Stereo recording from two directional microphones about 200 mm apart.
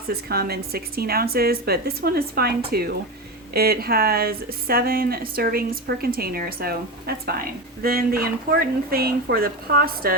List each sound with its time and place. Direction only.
0.1 s speech: 50° right (ahead or behind)